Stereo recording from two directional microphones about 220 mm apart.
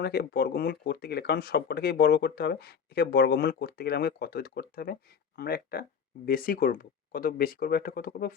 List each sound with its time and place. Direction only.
0.0 s speech: 45° left (ahead or behind)